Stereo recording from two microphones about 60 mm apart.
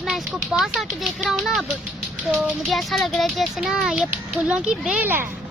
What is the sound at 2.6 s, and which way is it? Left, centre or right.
A child's voice, centre.